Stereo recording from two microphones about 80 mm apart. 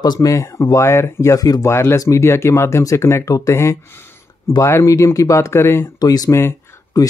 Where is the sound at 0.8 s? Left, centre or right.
Left.